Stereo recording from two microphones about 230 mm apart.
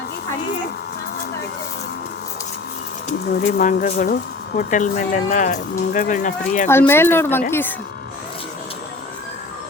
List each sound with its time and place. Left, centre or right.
3.4 s speech: left
6.7 s speech: centre